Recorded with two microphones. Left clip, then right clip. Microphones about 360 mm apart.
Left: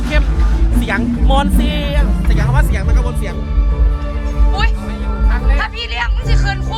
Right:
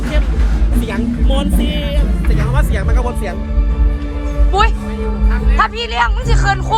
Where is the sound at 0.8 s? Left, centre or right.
Centre.